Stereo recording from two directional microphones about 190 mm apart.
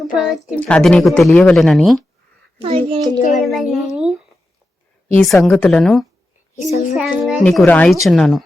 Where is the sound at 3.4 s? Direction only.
Centre (ahead or behind).